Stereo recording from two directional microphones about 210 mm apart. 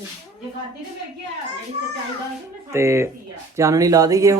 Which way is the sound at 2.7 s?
15° right (ahead or behind).